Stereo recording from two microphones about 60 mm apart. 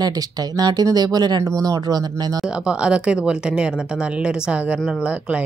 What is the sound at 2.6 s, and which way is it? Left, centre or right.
Speech, centre.